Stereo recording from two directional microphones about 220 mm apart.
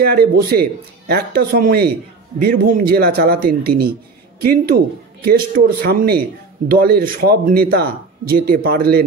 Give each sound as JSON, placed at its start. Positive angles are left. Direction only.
{"t": 0.0, "sound": "speech", "side_deg": -45}